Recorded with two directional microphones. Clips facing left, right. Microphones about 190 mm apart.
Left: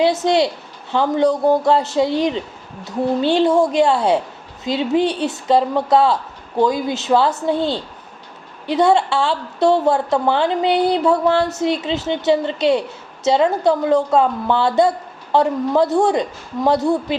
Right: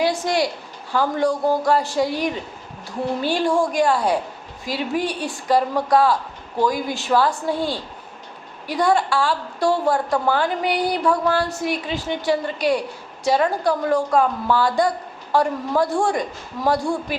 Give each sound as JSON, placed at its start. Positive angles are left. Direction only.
{"t": 0.0, "sound": "a woman's voice", "side_deg": 25}